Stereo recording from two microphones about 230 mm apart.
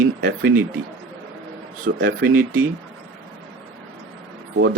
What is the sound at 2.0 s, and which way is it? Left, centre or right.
Speech, right.